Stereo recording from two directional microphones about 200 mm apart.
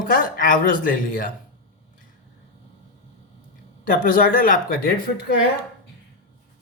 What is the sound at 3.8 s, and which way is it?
Speech, 45° left (ahead or behind).